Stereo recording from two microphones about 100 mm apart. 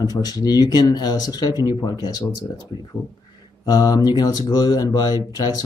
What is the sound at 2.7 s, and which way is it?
Speech, 55° left (ahead or behind).